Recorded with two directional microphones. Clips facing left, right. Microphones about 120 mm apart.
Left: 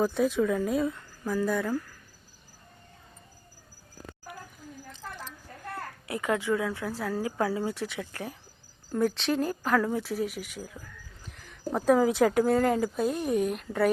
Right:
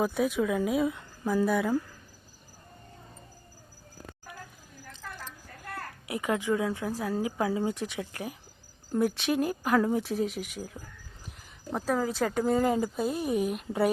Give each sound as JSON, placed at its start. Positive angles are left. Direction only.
{"t": 0.0, "sound": "speech", "side_deg": 0}
{"t": 0.9, "sound": "a woman's voice", "side_deg": -15}
{"t": 6.1, "sound": "speech", "side_deg": -15}
{"t": 11.7, "sound": "speech", "side_deg": 5}